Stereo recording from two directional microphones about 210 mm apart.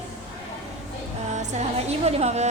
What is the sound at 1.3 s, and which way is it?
Music, 35° right (ahead or behind).